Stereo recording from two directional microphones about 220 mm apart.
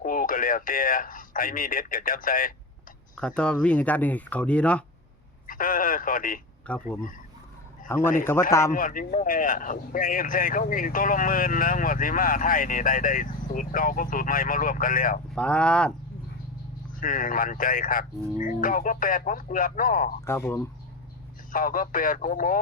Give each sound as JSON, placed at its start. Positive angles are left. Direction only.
{"t": 0.0, "sound": "speech", "side_deg": 40}
{"t": 3.2, "sound": "speech", "side_deg": 5}
{"t": 5.5, "sound": "speech", "side_deg": 40}
{"t": 6.7, "sound": "speech", "side_deg": 5}
{"t": 7.9, "sound": "a man's voice", "side_deg": 10}
{"t": 8.7, "sound": "speech", "side_deg": 40}
{"t": 15.4, "sound": "speech", "side_deg": 5}
{"t": 16.9, "sound": "speech", "side_deg": 35}
{"t": 20.2, "sound": "a man's voice", "side_deg": 10}
{"t": 21.5, "sound": "speech", "side_deg": 40}